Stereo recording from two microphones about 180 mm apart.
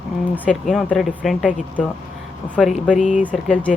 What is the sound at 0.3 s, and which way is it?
Speech, 5° left (ahead or behind).